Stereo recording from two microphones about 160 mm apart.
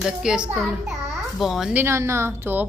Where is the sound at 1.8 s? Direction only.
15° right (ahead or behind).